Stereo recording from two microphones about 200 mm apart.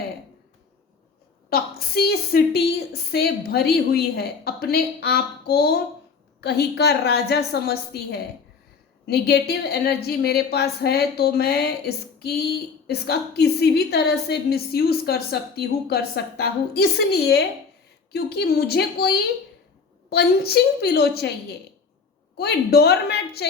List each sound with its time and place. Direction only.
1.5 s a woman's voice: 50° left (ahead or behind)
22.4 s a woman's voice: 55° left (ahead or behind)